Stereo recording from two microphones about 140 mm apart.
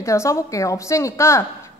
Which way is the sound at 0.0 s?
20° left (ahead or behind).